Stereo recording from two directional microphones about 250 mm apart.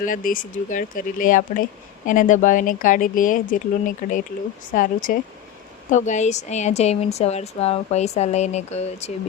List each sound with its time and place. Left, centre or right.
0.0 s a woman's voice: left